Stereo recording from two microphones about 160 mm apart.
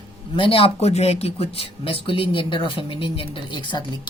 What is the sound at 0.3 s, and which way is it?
Speech, 35° left (ahead or behind).